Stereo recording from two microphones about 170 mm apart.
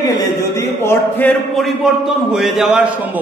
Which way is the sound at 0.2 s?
15° left (ahead or behind).